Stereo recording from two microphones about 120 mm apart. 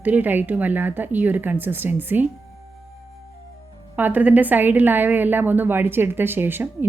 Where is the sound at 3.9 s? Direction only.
15° right (ahead or behind).